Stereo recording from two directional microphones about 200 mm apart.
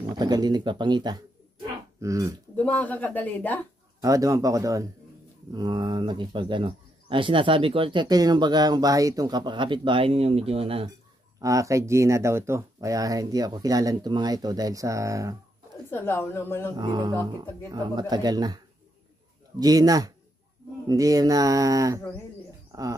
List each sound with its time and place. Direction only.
0.0 s speech: 20° right (ahead or behind)
2.5 s speech: 10° left (ahead or behind)
4.0 s speech: 15° right (ahead or behind)
11.4 s speech: 15° right (ahead or behind)
15.9 s speech: 10° left (ahead or behind)
16.7 s speech: 20° right (ahead or behind)
19.6 s speech: 20° right (ahead or behind)